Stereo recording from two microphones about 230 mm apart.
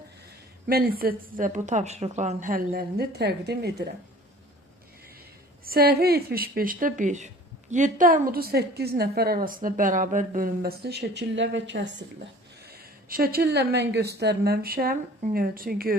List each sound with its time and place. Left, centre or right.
0.7 s a woman's voice: right
5.6 s a woman's voice: right
12.7 s a woman's voice: right